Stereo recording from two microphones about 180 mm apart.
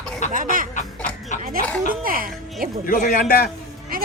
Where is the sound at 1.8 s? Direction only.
50° right (ahead or behind).